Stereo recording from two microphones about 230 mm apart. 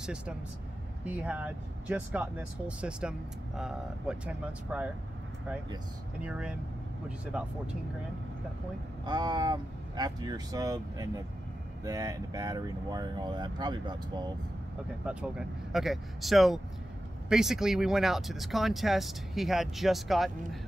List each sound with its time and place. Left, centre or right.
0.0 s speech: centre
6.2 s speech: centre
9.0 s speech: centre
15.0 s speech: centre